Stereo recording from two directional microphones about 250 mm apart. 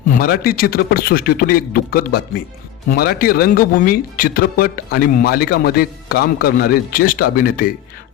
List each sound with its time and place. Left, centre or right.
0.1 s speech: left